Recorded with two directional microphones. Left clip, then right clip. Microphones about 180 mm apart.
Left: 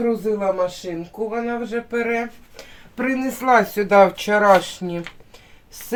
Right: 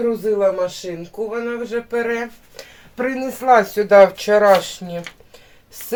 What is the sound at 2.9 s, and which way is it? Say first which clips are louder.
Speech: right 1 dB; 10° left (ahead or behind).